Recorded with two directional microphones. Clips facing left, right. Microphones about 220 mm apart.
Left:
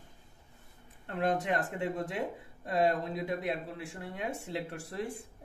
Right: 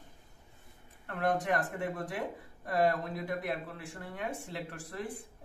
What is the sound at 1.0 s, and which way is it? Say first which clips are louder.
A man's voice: left 1 dB; 25° left (ahead or behind).